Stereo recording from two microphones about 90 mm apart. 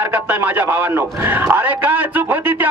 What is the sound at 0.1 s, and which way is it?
A man's voice, 20° right (ahead or behind).